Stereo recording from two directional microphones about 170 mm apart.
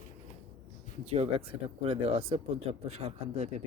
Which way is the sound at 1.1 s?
35° right (ahead or behind).